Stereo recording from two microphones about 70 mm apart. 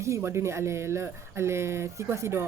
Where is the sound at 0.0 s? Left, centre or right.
Right.